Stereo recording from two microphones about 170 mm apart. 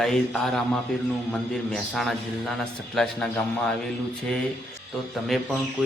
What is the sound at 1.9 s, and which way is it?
A man's voice, centre (ahead or behind).